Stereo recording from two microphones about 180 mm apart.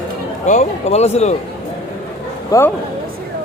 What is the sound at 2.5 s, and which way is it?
Speech, 20° left (ahead or behind).